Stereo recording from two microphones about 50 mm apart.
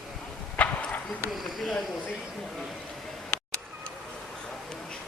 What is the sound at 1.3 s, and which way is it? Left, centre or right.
Speech, centre.